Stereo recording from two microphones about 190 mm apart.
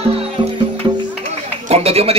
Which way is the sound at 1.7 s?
30° right (ahead or behind).